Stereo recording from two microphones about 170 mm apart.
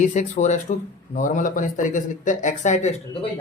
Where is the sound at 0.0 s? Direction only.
45° left (ahead or behind).